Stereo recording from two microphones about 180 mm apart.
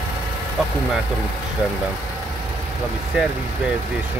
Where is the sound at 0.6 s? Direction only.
Centre (ahead or behind).